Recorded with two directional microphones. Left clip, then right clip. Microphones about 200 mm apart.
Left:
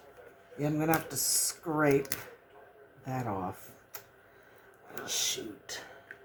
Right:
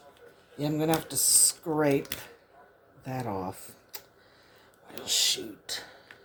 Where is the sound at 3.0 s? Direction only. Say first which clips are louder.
Right 1 dB; 25° right (ahead or behind).